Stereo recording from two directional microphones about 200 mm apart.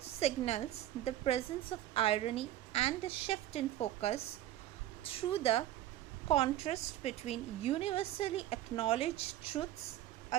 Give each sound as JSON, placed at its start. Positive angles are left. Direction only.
{"t": 0.2, "sound": "a woman's voice", "side_deg": 30}